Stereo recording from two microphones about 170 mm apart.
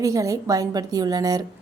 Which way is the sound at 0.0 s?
20° right (ahead or behind).